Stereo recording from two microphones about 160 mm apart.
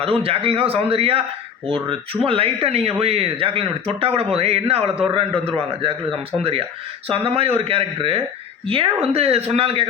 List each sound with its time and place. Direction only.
0.0 s speech: 35° right (ahead or behind)
6.4 s speech: 35° right (ahead or behind)